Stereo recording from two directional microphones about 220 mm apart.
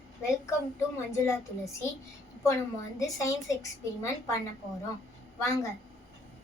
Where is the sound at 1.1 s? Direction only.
15° left (ahead or behind).